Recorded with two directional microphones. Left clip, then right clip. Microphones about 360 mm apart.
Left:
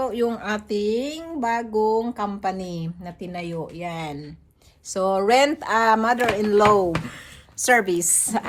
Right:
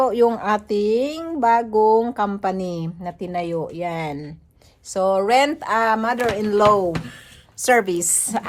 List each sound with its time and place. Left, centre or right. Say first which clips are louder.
0.0 s speech: right 7 dB; centre
4.9 s speech: right 2 dB; centre